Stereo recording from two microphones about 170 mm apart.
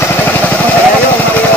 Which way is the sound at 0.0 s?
10° left (ahead or behind).